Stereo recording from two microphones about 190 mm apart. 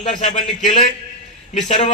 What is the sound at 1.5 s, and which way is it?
Speech, 40° left (ahead or behind).